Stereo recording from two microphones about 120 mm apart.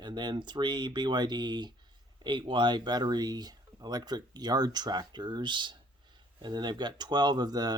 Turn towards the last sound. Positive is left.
turn(degrees=-35)  # may be behind; listen again after turning